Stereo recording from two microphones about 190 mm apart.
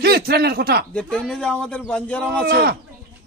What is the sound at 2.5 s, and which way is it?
Speech, 55° right (ahead or behind).